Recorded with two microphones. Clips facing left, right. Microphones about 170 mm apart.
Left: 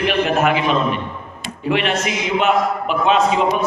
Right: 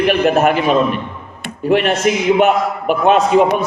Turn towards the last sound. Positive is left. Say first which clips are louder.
# right 4 dB
turn(degrees=-55)  # may be behind; listen again after turning